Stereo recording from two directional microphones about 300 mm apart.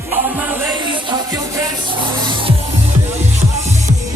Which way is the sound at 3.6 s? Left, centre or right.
Right.